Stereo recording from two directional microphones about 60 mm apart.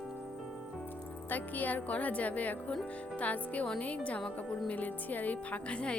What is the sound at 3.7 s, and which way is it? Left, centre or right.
Speech, left.